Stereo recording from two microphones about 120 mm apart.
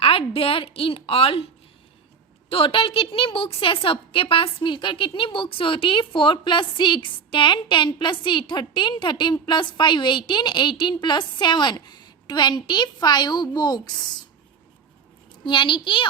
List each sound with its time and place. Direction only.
0.0 s a woman's voice: 50° left (ahead or behind)
2.5 s a woman's voice: 50° left (ahead or behind)
15.4 s a woman's voice: 40° left (ahead or behind)